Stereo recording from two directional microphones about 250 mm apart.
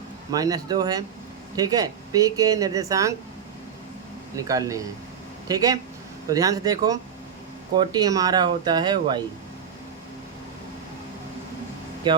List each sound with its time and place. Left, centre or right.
0.3 s speech: centre
4.4 s speech: centre
12.1 s speech: centre